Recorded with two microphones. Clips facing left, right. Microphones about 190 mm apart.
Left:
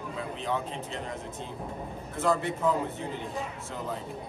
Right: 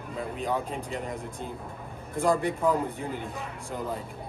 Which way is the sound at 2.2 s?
15° right (ahead or behind).